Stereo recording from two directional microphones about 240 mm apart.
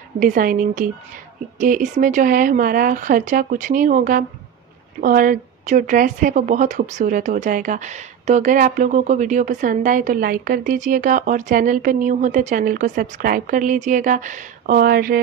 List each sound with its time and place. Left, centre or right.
0.2 s speech: right